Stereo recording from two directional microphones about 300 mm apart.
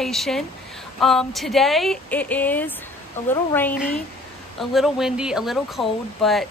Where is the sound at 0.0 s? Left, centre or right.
Centre.